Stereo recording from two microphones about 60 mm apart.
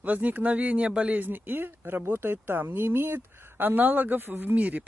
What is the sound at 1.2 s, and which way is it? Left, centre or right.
Speech, right.